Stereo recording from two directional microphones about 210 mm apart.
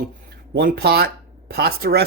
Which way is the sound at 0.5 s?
50° right (ahead or behind).